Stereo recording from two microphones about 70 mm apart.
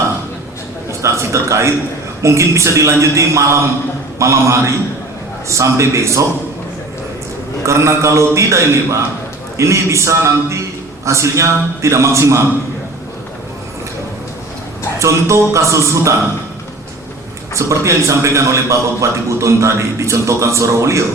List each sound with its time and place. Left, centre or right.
0.9 s a sound: right
2.2 s a man's voice: right
7.6 s a man's voice: right
14.9 s a man's voice: right
17.5 s a man's voice: right